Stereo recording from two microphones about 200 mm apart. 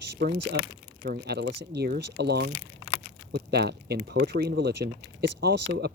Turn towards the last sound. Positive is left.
turn(degrees=-55)  # may be behind; listen again after turning